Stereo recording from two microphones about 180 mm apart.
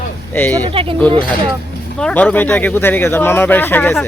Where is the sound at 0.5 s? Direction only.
25° right (ahead or behind).